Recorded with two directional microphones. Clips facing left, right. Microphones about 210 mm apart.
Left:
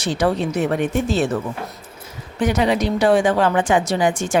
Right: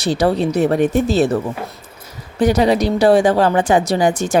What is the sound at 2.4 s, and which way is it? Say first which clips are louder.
Speech: right 4 dB; 35° right (ahead or behind).